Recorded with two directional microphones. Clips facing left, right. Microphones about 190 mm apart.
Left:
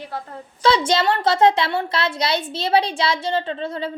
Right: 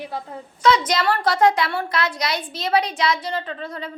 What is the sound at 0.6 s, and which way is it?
A woman's voice, 30° left (ahead or behind).